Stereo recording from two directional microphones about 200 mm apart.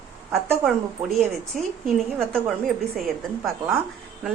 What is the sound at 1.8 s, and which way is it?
A woman's voice, centre (ahead or behind).